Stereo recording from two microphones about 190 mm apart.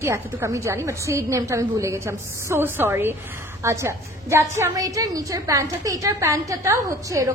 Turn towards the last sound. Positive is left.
turn(degrees=-15)  # may be behind; listen again after turning